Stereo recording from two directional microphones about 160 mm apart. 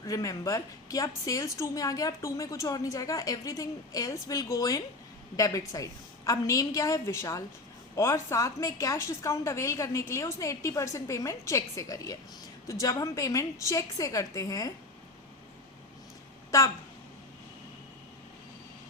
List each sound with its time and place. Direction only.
0.0 s a woman's voice: 20° left (ahead or behind)
16.5 s speech: 20° left (ahead or behind)